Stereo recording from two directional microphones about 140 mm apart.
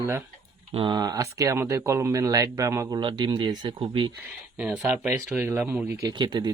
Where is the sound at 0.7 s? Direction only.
35° right (ahead or behind).